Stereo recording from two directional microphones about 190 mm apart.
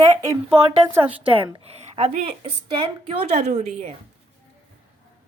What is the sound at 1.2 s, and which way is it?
A woman's voice, 30° right (ahead or behind).